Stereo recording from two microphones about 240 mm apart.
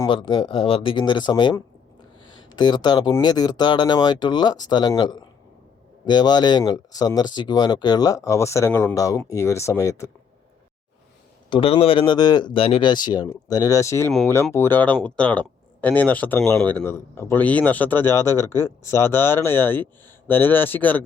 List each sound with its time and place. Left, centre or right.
0.0 s speech: centre
11.4 s speech: left